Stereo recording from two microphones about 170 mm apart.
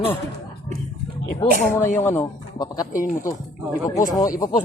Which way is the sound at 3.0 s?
50° left (ahead or behind).